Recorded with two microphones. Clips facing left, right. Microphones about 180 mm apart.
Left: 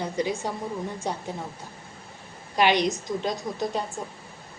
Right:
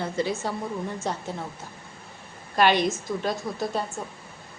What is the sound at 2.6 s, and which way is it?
A woman's voice, 15° left (ahead or behind).